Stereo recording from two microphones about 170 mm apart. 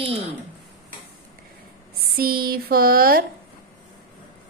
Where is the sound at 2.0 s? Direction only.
60° right (ahead or behind).